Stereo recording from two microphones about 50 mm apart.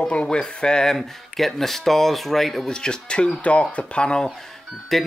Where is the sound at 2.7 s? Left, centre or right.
Centre.